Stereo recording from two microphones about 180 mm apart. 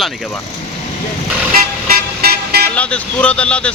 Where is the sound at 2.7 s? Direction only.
5° left (ahead or behind).